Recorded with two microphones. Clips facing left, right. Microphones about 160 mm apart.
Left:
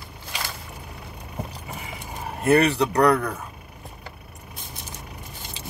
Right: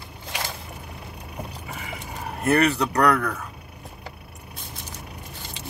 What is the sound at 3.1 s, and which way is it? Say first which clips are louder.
Speech: even; 20° left (ahead or behind).